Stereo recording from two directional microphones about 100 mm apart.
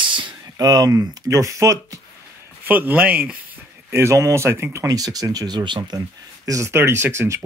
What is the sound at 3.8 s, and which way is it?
Speech, 30° right (ahead or behind).